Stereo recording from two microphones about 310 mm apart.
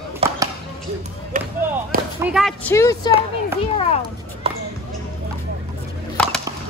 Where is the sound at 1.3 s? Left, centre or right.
Right.